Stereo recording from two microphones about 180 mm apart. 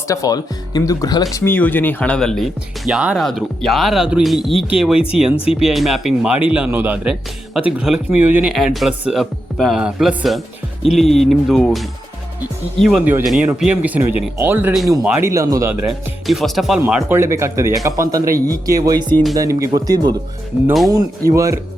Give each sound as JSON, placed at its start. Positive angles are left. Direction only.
{"t": 0.1, "sound": "speech", "side_deg": 20}
{"t": 15.9, "sound": "speech", "side_deg": 0}
{"t": 17.0, "sound": "speech", "side_deg": -15}
{"t": 21.2, "sound": "speech", "side_deg": -15}